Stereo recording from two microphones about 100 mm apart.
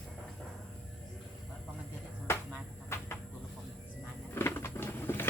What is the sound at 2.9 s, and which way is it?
Chicken, 25° left (ahead or behind).